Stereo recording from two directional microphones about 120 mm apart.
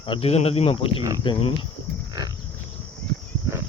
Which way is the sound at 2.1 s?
35° right (ahead or behind).